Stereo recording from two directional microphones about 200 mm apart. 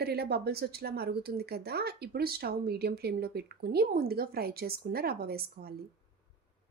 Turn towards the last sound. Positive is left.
turn(degrees=-50)  # may be behind; listen again after turning